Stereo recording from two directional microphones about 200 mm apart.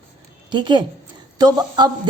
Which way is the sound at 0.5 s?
20° right (ahead or behind).